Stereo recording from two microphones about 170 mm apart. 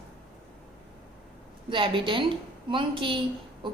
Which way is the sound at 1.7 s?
30° right (ahead or behind).